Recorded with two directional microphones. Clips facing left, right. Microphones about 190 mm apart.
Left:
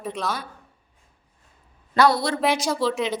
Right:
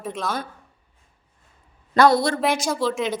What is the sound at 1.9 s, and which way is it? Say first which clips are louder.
Speech: right 3 dB; 50° right (ahead or behind).